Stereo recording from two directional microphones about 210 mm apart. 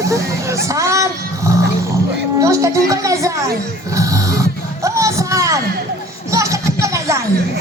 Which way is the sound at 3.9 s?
15° right (ahead or behind).